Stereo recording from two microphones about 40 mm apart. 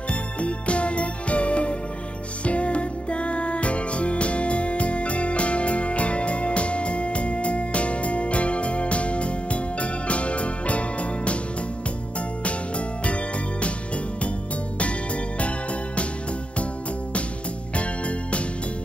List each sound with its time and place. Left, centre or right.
0.1 s music: left
12.4 s music: left
17.7 s music: left